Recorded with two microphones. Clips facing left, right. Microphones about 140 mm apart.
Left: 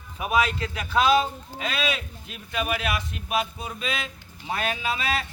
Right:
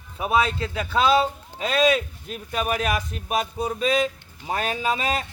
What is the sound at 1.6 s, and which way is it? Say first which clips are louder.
Speech: right 8 dB; 40° right (ahead or behind).